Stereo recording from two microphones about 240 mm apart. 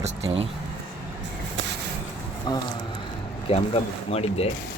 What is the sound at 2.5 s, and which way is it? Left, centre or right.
A man's voice, centre.